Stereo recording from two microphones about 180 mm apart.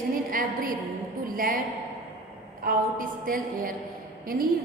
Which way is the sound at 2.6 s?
50° right (ahead or behind).